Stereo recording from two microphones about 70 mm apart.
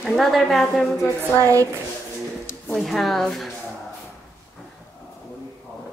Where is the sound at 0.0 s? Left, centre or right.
Centre.